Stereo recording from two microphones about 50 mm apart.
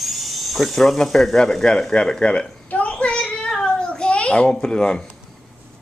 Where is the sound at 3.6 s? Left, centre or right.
Centre.